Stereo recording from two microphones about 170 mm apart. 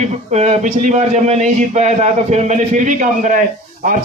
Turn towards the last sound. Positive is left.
turn(degrees=-50)  # may be behind; listen again after turning